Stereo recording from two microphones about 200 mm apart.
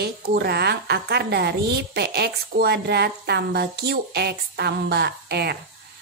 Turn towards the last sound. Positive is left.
turn(degrees=-55)  # may be behind; listen again after turning